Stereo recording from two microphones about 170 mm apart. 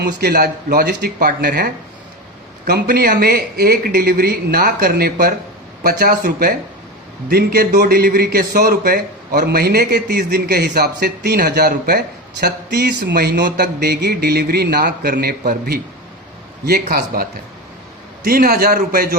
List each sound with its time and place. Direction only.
0.0 s a man's voice: 65° right (ahead or behind)
12.4 s speech: 75° right (ahead or behind)
18.2 s a man's voice: 60° right (ahead or behind)